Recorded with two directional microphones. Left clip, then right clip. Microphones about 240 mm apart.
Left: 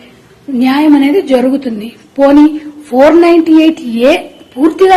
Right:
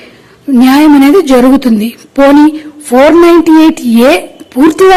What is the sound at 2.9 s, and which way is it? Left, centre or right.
A woman's voice, right.